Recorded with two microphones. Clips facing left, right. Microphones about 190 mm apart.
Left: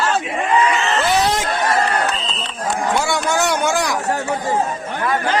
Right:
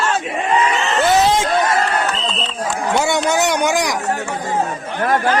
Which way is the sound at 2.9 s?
20° right (ahead or behind).